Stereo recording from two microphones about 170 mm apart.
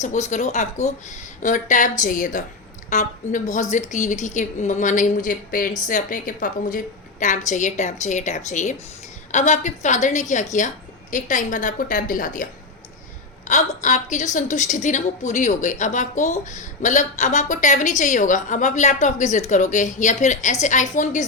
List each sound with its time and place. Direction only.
0.0 s a woman's voice: 45° left (ahead or behind)
13.5 s a woman's voice: 45° left (ahead or behind)